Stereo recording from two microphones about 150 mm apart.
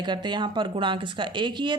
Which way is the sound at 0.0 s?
30° right (ahead or behind).